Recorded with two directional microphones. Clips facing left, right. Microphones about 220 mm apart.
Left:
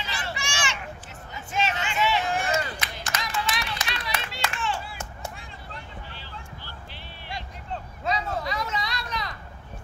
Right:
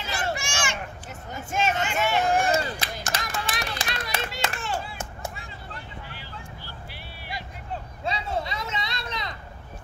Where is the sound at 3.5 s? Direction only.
45° right (ahead or behind).